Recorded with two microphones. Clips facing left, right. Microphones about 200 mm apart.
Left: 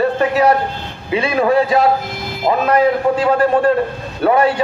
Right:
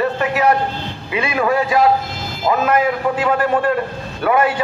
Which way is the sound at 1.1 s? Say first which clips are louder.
Left 4 dB; 30° left (ahead or behind).